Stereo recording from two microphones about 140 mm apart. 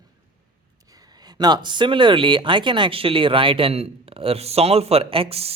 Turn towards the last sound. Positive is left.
turn(degrees=-45)  # may be behind; listen again after turning